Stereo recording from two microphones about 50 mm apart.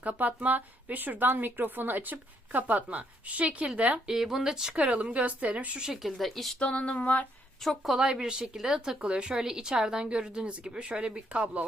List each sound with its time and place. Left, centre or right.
0.0 s a woman's voice: right
4.0 s speech: centre
4.7 s a woman's voice: right
5.8 s speech: centre
6.6 s a sound: left
7.6 s speech: centre
7.9 s a woman's voice: centre